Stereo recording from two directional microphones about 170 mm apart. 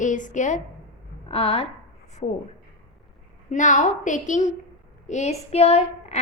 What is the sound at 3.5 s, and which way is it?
A woman's voice, 45° left (ahead or behind).